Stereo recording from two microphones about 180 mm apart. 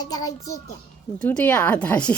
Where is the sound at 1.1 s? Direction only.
5° left (ahead or behind).